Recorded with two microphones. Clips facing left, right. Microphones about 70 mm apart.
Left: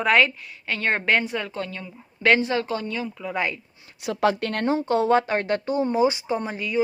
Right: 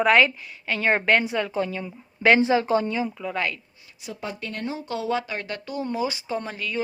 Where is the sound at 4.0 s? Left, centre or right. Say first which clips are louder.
Left 11 dB; left.